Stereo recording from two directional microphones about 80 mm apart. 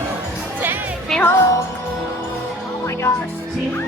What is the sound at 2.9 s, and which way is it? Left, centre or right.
Music, left.